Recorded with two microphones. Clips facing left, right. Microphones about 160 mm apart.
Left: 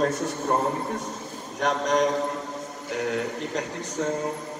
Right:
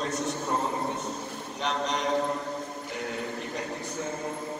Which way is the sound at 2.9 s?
85° left.